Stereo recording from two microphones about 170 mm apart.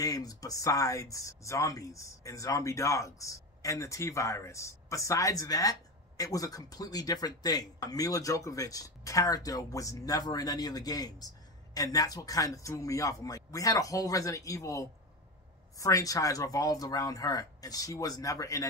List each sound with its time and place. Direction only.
0.0 s speech: 20° left (ahead or behind)